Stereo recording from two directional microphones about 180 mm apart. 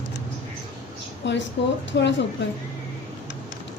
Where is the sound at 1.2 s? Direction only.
75° left (ahead or behind).